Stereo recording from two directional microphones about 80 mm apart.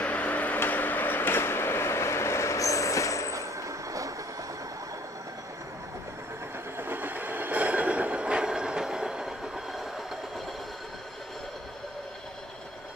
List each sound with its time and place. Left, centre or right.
0.0 s a sound: centre; by 3.3 s left
3.3 s vehicle: right
6.8 s train: right; by 10.4 s centre